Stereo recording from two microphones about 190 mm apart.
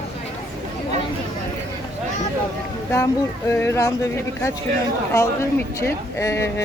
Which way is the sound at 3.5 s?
15° left (ahead or behind).